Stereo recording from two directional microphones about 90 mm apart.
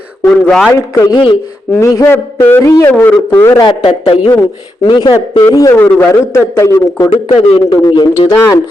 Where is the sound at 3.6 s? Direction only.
70° left (ahead or behind).